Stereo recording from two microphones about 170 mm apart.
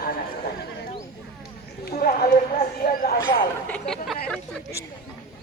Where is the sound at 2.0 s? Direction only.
60° left (ahead or behind).